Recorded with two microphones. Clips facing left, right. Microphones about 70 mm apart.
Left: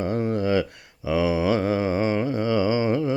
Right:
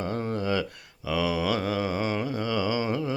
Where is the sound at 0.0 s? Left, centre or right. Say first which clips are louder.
Left 5 dB; left.